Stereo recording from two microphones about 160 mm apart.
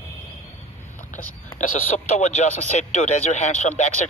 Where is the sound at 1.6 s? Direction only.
50° left (ahead or behind).